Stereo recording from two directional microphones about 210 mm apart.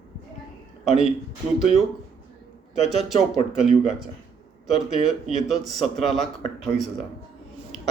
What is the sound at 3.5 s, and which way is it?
A man's voice, centre (ahead or behind).